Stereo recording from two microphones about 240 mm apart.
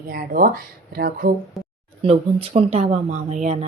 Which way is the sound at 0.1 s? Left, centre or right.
Right.